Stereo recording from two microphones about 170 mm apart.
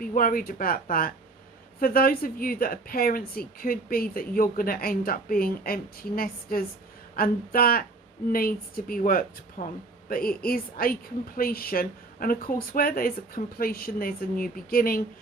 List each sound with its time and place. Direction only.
0.0 s a woman's voice: 55° left (ahead or behind)